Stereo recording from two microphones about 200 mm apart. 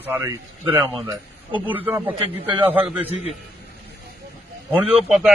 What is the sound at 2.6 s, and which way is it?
Speech, 5° right (ahead or behind).